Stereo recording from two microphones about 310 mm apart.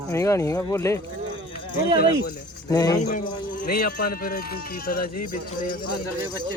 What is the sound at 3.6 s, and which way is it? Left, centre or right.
Speech, left.